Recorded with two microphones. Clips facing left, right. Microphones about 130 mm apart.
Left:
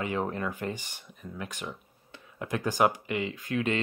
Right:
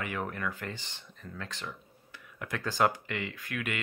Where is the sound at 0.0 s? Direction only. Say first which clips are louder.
Left 4 dB; 20° left (ahead or behind).